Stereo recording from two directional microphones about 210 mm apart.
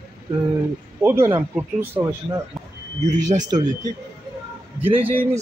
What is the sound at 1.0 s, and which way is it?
Speech, 10° right (ahead or behind).